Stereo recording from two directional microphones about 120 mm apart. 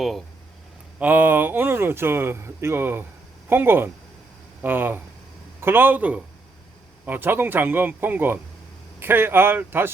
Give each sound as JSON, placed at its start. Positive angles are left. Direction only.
{"t": 0.9, "sound": "speech", "side_deg": -15}